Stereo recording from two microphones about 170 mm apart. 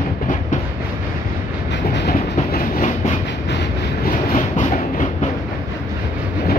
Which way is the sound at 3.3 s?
85° left.